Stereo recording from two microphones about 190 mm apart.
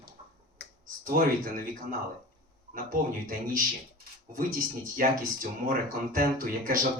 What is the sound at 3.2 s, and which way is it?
Speech, 50° right (ahead or behind).